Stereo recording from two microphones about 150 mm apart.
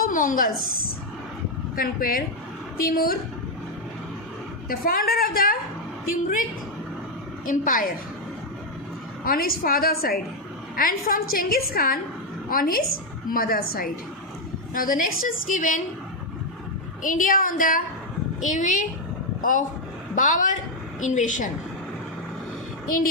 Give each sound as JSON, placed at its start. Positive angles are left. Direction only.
{"t": 0.0, "sound": "a woman's voice", "side_deg": 60}
{"t": 1.7, "sound": "a woman's voice", "side_deg": 75}
{"t": 4.7, "sound": "a woman's voice", "side_deg": 75}
{"t": 7.4, "sound": "a woman's voice", "side_deg": 65}
{"t": 9.2, "sound": "a woman's voice", "side_deg": 80}
{"t": 10.8, "sound": "a woman's voice", "side_deg": 70}
{"t": 14.7, "sound": "a woman's voice", "side_deg": 65}
{"t": 17.0, "sound": "a woman's voice", "side_deg": 60}
{"t": 18.4, "sound": "a woman's voice", "side_deg": 55}